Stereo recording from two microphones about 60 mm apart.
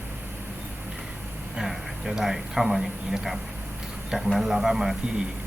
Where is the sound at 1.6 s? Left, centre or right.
Centre.